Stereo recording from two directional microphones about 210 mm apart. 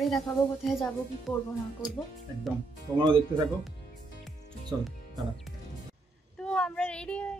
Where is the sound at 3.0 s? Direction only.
20° right (ahead or behind).